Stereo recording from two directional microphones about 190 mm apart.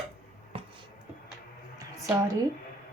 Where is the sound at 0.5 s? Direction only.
30° right (ahead or behind).